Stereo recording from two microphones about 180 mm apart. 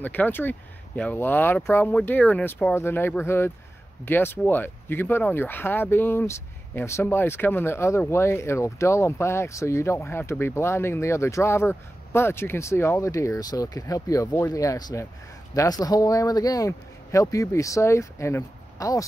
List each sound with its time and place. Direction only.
0.0 s speech: 10° left (ahead or behind)